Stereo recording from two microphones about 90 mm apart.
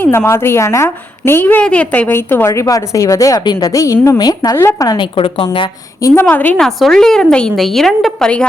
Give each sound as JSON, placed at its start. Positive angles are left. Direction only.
{"t": 0.0, "sound": "a woman's voice", "side_deg": 25}
{"t": 2.5, "sound": "speech", "side_deg": 40}
{"t": 3.7, "sound": "speech", "side_deg": 35}
{"t": 4.5, "sound": "a woman's voice", "side_deg": 30}
{"t": 4.9, "sound": "a woman's voice", "side_deg": 75}
{"t": 6.2, "sound": "a woman's voice", "side_deg": 20}
{"t": 6.6, "sound": "a woman's voice", "side_deg": 5}